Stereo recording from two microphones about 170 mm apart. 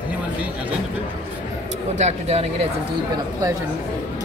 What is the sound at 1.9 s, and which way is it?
Speech, 40° right (ahead or behind).